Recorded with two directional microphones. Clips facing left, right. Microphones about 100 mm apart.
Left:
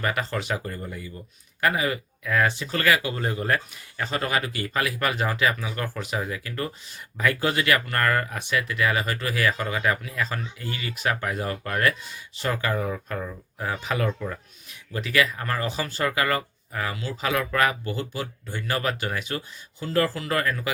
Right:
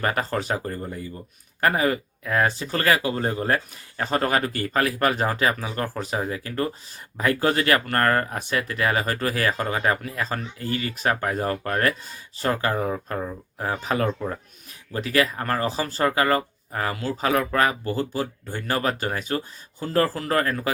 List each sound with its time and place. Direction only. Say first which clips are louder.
0.0 s speech: right 3 dB; 40° right (ahead or behind)